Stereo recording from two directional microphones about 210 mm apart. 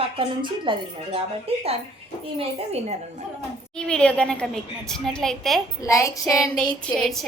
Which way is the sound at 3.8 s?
5° left (ahead or behind).